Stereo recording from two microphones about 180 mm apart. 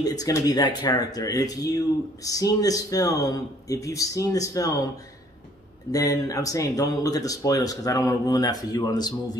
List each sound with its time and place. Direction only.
0.0 s speech: 20° left (ahead or behind)
5.9 s speech: 20° left (ahead or behind)